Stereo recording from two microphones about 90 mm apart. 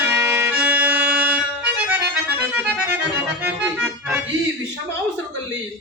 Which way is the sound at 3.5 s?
15° right (ahead or behind).